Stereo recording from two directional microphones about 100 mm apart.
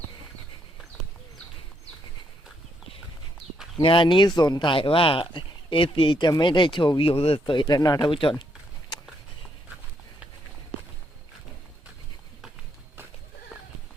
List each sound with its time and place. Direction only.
3.8 s speech: 60° left (ahead or behind)
4.7 s speech: 60° left (ahead or behind)